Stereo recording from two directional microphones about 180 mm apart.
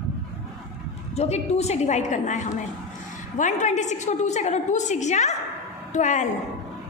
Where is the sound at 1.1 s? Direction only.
35° left (ahead or behind).